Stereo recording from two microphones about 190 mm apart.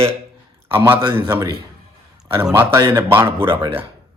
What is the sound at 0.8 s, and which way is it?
Speech, 10° right (ahead or behind).